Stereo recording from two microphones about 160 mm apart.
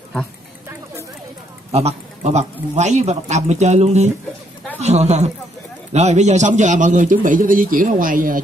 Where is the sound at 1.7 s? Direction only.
40° right (ahead or behind).